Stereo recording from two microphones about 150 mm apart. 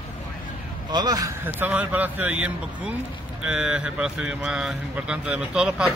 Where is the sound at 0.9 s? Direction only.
25° right (ahead or behind).